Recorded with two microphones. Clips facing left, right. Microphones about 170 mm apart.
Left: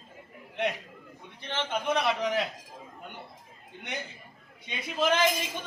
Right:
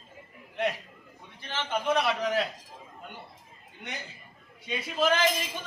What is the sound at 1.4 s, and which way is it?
A man's voice, 20° left (ahead or behind).